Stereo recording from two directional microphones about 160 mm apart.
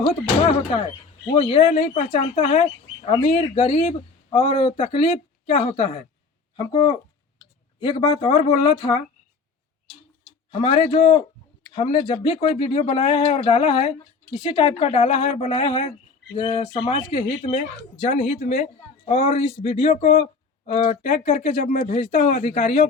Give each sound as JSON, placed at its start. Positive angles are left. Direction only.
{"t": 0.0, "sound": "speech", "side_deg": 35}
{"t": 10.5, "sound": "a man's voice", "side_deg": 30}